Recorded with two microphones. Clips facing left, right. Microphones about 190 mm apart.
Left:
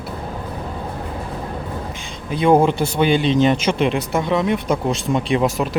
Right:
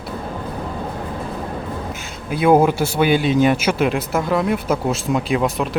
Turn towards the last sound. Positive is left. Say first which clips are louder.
# left 1 dB
turn(degrees=0)  # may be behind; listen again after turning